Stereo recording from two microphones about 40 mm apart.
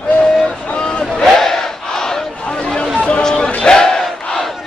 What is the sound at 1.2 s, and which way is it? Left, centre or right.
Battle cry, centre.